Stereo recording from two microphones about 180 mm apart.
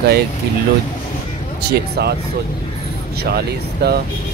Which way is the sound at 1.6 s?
65° right (ahead or behind).